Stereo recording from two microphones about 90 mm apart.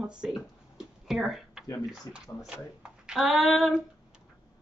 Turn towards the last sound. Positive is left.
turn(degrees=-5)  # may be behind; listen again after turning